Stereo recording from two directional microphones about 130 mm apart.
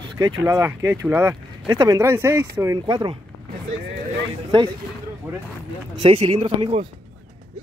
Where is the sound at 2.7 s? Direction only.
30° right (ahead or behind).